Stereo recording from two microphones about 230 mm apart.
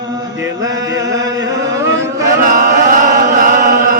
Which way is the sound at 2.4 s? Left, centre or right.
Right.